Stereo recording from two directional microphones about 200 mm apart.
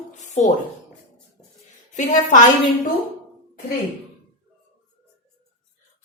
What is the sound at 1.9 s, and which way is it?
Speech, 40° left (ahead or behind).